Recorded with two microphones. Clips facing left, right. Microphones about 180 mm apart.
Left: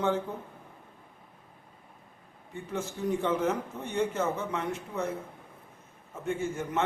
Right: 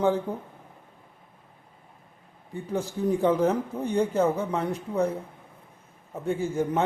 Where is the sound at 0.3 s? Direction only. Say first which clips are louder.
Right 5 dB; 35° right (ahead or behind).